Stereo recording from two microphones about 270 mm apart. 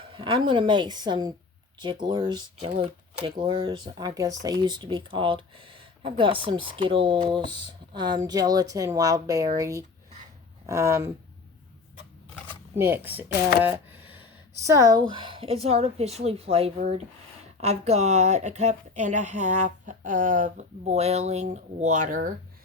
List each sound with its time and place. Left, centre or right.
0.0 s speech: centre
12.8 s speech: centre; by 22.3 s right